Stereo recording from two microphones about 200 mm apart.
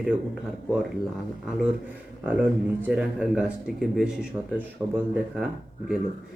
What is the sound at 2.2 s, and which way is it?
Speech, 10° right (ahead or behind).